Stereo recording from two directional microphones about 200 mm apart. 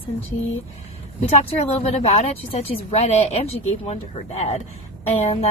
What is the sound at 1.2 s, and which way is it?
Speech, 30° left (ahead or behind).